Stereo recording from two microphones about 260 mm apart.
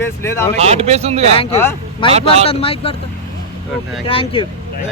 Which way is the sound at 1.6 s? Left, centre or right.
Centre.